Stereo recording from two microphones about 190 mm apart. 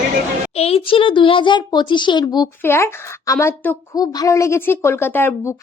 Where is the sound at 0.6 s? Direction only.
30° left (ahead or behind).